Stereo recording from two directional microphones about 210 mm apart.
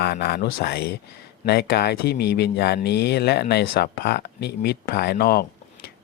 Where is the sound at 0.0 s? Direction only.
50° left (ahead or behind).